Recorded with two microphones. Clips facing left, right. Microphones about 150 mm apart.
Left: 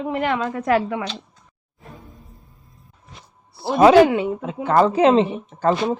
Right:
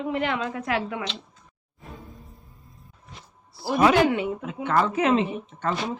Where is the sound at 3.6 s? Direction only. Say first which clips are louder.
Left 7 dB; 25° left (ahead or behind).